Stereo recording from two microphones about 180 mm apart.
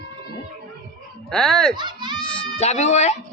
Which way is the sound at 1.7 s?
25° right (ahead or behind).